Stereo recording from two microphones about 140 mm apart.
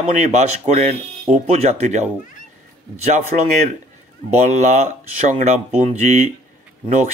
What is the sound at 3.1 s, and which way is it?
Speech, 55° right (ahead or behind).